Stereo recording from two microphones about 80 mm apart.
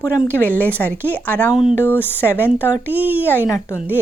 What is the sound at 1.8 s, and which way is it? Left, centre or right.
Speech, left.